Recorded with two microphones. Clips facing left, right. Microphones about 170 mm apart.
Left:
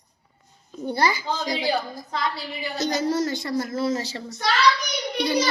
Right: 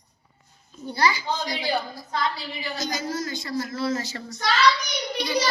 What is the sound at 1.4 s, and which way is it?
Speech, 20° left (ahead or behind).